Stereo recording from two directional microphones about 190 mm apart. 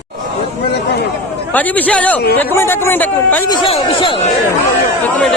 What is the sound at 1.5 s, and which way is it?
Speech, 10° left (ahead or behind).